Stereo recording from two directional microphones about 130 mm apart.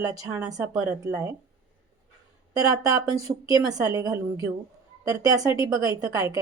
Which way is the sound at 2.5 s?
25° right (ahead or behind).